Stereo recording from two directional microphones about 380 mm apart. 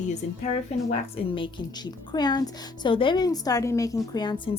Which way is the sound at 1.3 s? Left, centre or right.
Centre.